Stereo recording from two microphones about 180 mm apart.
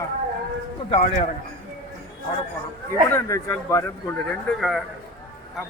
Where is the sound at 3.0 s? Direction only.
15° left (ahead or behind).